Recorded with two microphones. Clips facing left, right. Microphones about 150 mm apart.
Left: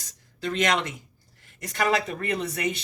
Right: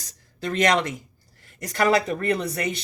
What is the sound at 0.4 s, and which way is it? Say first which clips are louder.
Speech: right 4 dB; 40° right (ahead or behind).